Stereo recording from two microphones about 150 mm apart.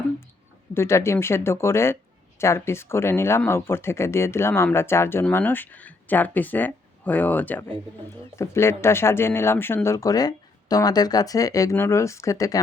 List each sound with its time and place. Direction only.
0.7 s speech: 15° left (ahead or behind)